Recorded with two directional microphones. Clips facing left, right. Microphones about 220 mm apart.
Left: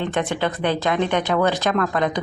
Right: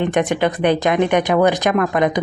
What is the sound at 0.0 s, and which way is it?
A woman's voice, 15° right (ahead or behind).